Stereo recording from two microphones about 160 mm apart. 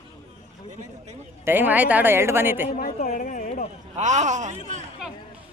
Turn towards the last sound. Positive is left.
turn(degrees=-50)  # may be behind; listen again after turning